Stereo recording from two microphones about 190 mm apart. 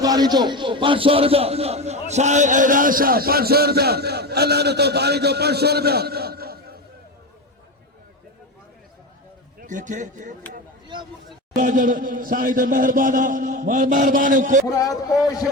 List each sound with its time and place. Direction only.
0.0 s a man's voice: 20° right (ahead or behind); by 6.7 s 55° right (ahead or behind)
9.6 s speech: 40° right (ahead or behind)
11.5 s a man's voice: 45° right (ahead or behind)
14.7 s speech: 20° left (ahead or behind)